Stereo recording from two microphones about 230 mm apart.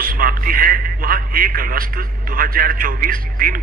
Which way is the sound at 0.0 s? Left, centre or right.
Right.